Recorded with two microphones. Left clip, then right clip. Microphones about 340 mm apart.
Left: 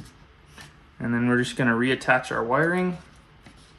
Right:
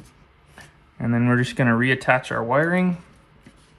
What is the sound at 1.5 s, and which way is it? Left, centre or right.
Speech, centre.